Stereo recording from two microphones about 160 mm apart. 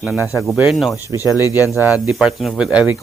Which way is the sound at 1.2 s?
20° left (ahead or behind).